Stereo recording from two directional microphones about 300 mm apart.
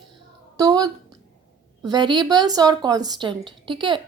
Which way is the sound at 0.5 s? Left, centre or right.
Centre.